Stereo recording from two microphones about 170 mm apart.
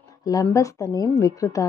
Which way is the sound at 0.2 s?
20° left (ahead or behind).